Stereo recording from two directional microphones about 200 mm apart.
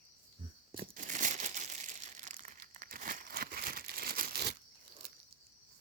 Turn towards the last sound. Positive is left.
turn(degrees=-50)  # may be behind; listen again after turning